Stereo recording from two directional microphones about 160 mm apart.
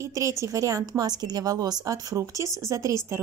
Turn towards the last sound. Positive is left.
turn(degrees=-20)  # may be behind; listen again after turning